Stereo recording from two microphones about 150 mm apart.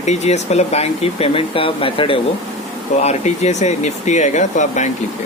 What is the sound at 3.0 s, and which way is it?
Speech, 50° left (ahead or behind).